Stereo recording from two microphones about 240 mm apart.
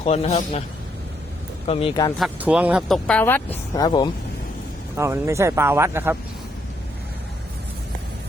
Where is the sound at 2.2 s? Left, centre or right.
Centre.